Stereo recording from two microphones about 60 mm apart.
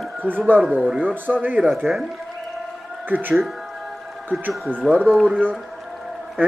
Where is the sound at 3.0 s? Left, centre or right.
Right.